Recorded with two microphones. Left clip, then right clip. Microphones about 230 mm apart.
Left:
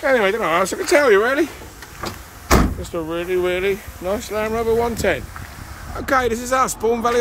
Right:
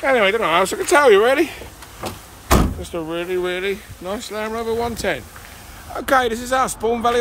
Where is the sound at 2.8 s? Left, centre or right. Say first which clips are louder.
Left 1 dB; centre.